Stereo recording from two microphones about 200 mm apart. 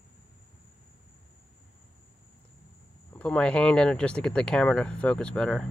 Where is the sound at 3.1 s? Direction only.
5° left (ahead or behind).